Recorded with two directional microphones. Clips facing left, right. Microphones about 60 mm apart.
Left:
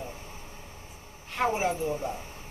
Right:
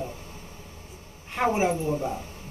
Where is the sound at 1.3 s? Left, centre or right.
Centre.